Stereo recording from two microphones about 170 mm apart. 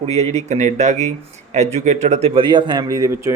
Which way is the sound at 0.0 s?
40° right (ahead or behind).